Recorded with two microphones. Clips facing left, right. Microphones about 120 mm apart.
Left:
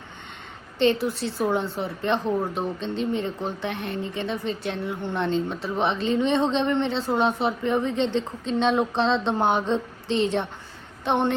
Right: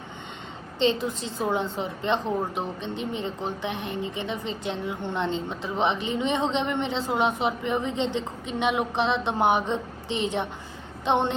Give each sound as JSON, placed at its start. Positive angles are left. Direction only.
{"t": 0.8, "sound": "a woman's voice", "side_deg": -20}